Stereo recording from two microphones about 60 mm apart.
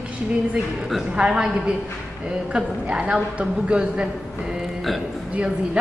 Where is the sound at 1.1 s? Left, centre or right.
Centre.